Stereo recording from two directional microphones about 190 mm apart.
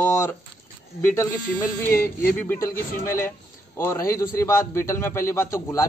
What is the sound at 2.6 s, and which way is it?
A man's voice, 15° left (ahead or behind).